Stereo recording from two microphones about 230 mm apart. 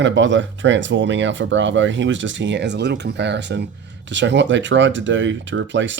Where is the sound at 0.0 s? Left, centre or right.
Right.